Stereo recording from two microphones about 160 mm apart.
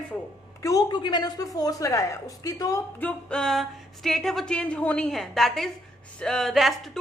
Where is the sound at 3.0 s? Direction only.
5° left (ahead or behind).